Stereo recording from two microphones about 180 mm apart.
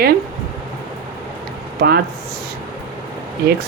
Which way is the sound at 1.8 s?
60° right (ahead or behind).